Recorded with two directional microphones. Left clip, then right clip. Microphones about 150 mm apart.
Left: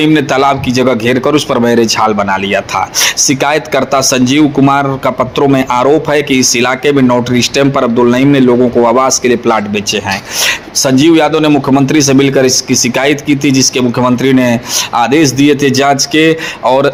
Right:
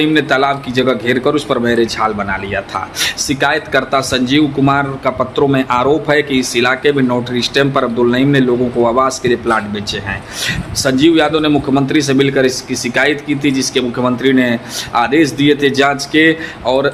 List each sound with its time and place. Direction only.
0.0 s a man's voice: 30° left (ahead or behind)